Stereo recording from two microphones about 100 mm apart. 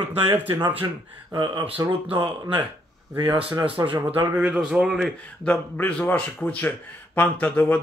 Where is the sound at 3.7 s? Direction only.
55° right (ahead or behind).